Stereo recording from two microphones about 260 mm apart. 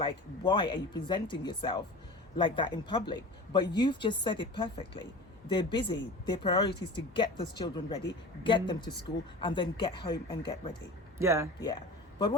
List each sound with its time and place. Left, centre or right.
0.0 s speech: centre
11.2 s speech: centre